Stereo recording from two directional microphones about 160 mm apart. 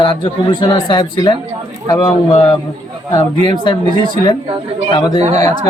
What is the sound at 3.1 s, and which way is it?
Speech, 30° left (ahead or behind).